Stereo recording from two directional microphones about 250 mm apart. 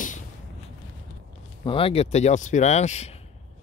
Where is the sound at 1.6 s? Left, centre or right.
Left.